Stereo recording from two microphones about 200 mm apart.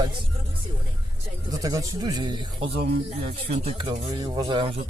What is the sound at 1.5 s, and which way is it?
Speech, 15° right (ahead or behind).